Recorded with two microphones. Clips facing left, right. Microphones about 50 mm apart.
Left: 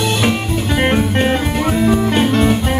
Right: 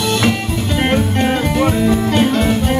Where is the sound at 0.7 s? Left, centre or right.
Centre.